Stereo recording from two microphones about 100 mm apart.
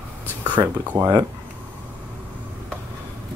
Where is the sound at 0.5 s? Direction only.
15° right (ahead or behind).